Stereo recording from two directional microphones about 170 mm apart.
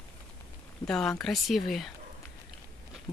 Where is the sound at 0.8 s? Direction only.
5° left (ahead or behind).